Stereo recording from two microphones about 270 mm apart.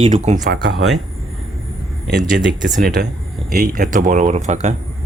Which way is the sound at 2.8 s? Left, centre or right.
Right.